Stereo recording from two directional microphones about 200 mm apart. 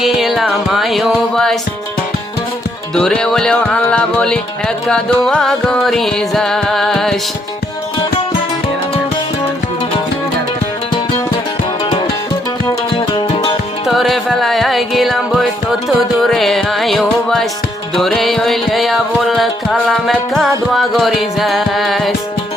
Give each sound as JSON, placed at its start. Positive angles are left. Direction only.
{"t": 0.0, "sound": "music", "side_deg": 0}
{"t": 2.9, "sound": "music", "side_deg": 5}
{"t": 13.1, "sound": "music", "side_deg": 25}
{"t": 13.8, "sound": "music", "side_deg": 0}